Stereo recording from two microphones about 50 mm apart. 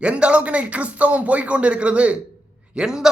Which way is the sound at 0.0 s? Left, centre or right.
Right.